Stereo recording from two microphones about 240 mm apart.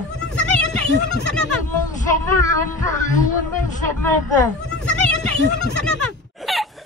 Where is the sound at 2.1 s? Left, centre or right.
Centre.